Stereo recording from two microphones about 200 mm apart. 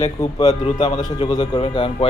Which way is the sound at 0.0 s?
30° left (ahead or behind).